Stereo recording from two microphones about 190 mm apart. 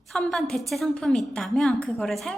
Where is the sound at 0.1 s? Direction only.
Centre (ahead or behind).